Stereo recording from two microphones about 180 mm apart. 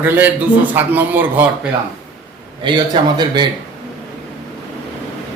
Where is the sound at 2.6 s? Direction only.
25° right (ahead or behind).